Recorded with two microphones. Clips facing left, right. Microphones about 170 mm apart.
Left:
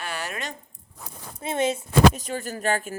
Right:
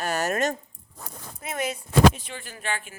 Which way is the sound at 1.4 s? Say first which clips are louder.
Left 6 dB; 25° left (ahead or behind).